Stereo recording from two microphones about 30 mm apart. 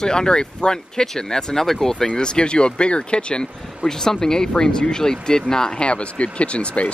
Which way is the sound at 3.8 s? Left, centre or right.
Centre.